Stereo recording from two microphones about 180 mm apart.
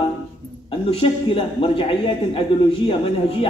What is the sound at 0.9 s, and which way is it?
A man's voice, 30° left (ahead or behind).